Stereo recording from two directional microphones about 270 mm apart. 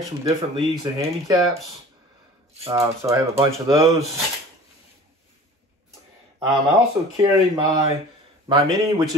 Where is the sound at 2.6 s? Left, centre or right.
Centre.